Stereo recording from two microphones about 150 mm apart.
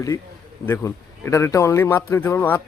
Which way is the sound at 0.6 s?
15° left (ahead or behind).